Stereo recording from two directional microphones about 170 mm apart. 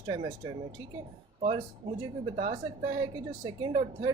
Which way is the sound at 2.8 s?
25° right (ahead or behind).